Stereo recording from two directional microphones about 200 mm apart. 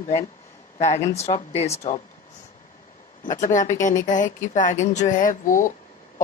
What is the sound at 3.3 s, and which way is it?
Speech, 40° left (ahead or behind).